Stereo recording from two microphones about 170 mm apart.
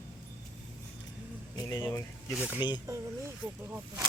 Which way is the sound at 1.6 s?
20° left (ahead or behind).